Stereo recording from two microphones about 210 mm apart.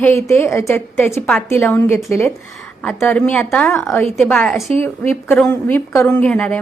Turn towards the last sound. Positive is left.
turn(degrees=5)  # may be behind; listen again after turning